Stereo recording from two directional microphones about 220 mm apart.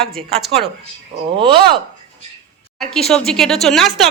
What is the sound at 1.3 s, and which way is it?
Speech, 20° right (ahead or behind).